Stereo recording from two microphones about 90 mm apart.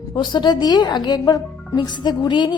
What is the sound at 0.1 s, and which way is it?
A woman's voice, 55° left (ahead or behind).